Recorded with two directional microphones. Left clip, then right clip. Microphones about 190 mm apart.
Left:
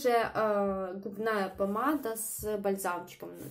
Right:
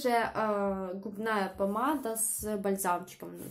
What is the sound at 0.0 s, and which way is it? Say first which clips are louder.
Speech: left 1 dB; 5° right (ahead or behind).